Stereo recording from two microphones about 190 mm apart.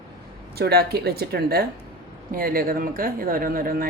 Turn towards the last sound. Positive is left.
turn(degrees=-50)  # may be behind; listen again after turning